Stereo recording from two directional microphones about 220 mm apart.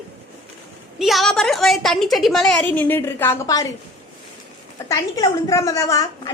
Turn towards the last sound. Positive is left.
turn(degrees=15)  # may be behind; listen again after turning